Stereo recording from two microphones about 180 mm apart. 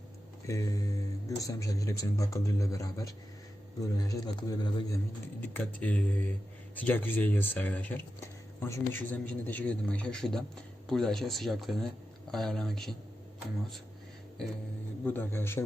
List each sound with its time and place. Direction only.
0.4 s speech: 20° left (ahead or behind)
5.4 s speech: 10° left (ahead or behind)
15.0 s speech: 10° left (ahead or behind)